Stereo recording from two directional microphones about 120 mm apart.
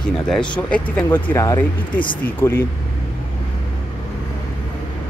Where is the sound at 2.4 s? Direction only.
20° left (ahead or behind).